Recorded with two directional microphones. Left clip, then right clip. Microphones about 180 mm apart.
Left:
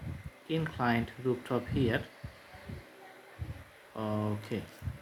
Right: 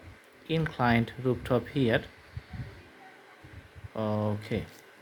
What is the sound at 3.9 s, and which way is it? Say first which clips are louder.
Speech: right 4 dB; 40° right (ahead or behind).